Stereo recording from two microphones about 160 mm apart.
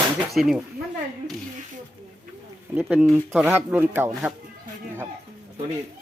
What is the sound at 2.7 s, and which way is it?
Speech, 10° right (ahead or behind).